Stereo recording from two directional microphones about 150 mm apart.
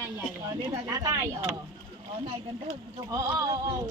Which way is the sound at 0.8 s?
25° right (ahead or behind).